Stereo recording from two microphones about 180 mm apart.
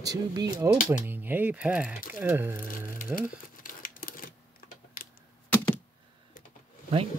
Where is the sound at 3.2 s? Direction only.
50° left (ahead or behind).